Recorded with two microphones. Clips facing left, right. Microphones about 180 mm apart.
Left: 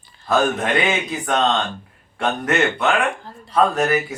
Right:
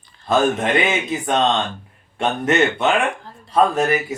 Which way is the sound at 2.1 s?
25° right (ahead or behind).